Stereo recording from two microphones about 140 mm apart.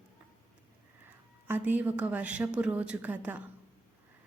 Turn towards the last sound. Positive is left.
turn(degrees=-10)  # may be behind; listen again after turning